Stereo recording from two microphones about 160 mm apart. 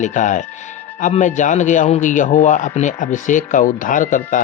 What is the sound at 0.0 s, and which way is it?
A man's voice, 50° left (ahead or behind).